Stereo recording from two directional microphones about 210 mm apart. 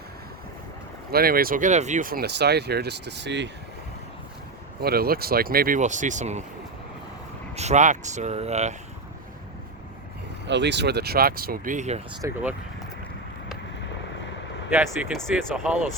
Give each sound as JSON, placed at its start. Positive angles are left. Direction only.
{"t": 1.1, "sound": "speech", "side_deg": -45}
{"t": 4.8, "sound": "speech", "side_deg": -45}
{"t": 7.5, "sound": "speech", "side_deg": -30}
{"t": 10.4, "sound": "speech", "side_deg": -55}
{"t": 12.2, "sound": "speech", "side_deg": -10}
{"t": 15.2, "sound": "speech", "side_deg": 0}